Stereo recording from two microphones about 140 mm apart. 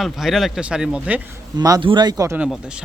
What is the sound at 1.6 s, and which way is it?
Speech, 25° right (ahead or behind).